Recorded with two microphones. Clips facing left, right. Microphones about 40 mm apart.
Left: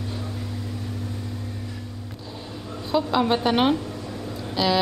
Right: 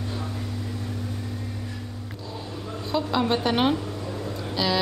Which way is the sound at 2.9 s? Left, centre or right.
Centre.